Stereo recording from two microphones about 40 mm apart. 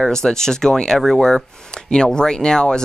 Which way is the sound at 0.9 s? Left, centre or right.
Centre.